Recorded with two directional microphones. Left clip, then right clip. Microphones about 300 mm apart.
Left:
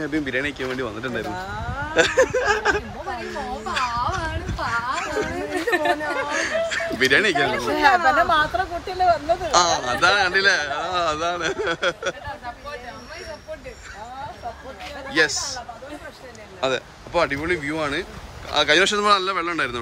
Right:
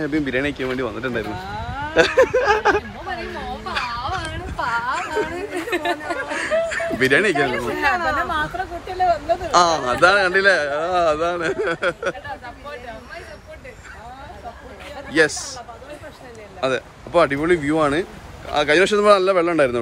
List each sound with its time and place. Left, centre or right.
0.0 s speech: centre
3.8 s a sound: centre
6.3 s speech: centre
7.7 s speech: left
8.8 s speech: centre
15.0 s speech: centre
16.6 s speech: centre